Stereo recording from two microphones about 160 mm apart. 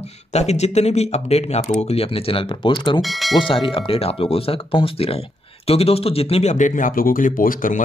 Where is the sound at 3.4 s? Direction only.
35° left (ahead or behind).